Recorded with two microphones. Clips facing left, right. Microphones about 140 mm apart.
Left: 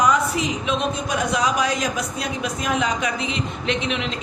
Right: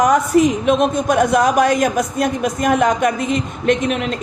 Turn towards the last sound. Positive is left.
turn(degrees=-50)  # may be behind; listen again after turning